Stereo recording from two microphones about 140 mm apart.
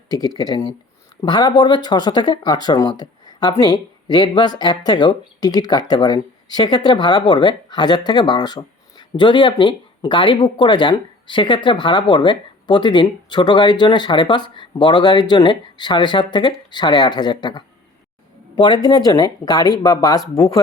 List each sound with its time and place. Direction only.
0.1 s speech: 30° left (ahead or behind)